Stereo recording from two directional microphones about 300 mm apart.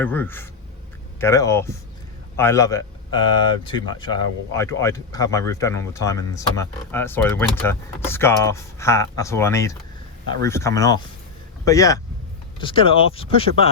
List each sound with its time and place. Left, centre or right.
0.0 s a man's voice: centre